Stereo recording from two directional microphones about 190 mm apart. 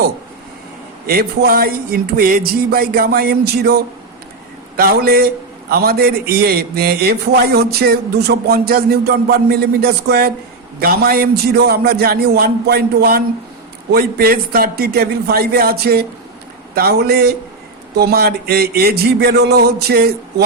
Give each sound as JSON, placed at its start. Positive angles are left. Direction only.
{"t": 1.0, "sound": "a man's voice", "side_deg": -55}